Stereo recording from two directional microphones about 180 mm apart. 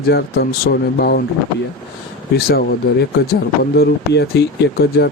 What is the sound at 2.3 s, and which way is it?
Speech, 55° left (ahead or behind).